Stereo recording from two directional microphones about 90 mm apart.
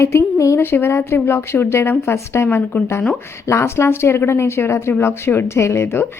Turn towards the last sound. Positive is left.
turn(degrees=30)  # may be behind; listen again after turning